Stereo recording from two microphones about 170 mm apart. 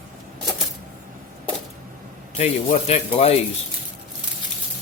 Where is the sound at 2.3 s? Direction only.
40° left (ahead or behind).